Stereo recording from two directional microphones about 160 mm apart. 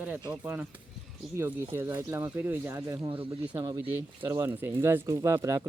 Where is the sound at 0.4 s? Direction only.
10° right (ahead or behind).